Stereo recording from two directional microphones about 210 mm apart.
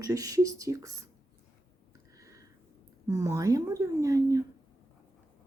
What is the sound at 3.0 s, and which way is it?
Speech, 15° right (ahead or behind).